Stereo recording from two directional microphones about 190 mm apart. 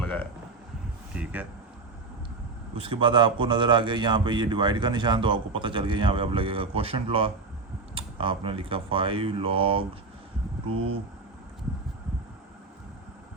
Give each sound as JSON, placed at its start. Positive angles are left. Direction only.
{"t": 0.0, "sound": "a sound", "side_deg": 5}
{"t": 1.1, "sound": "speech", "side_deg": -10}
{"t": 2.7, "sound": "a man's voice", "side_deg": -30}